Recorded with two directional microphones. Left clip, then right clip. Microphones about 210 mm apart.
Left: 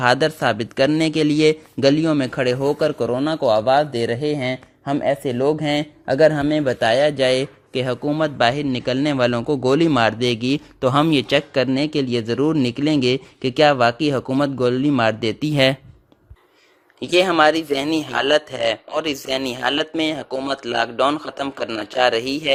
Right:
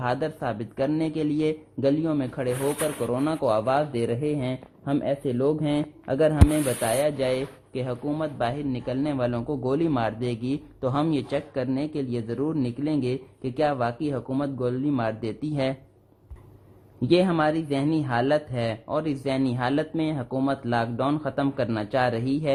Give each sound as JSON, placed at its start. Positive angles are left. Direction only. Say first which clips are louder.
{"t": 0.0, "sound": "a man's voice", "louder": "left 10 dB", "side_deg": 40}
{"t": 3.2, "sound": "speech", "louder": "left 5 dB", "side_deg": 25}
{"t": 6.1, "sound": "a man's voice", "louder": "left 7 dB", "side_deg": 25}
{"t": 17.0, "sound": "a man's voice", "louder": "left 7 dB", "side_deg": 40}